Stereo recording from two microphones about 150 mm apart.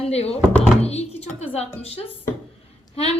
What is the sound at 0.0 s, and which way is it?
A woman's voice, 45° left (ahead or behind).